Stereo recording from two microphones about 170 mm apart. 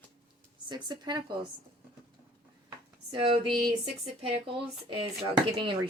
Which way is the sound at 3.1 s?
30° right (ahead or behind).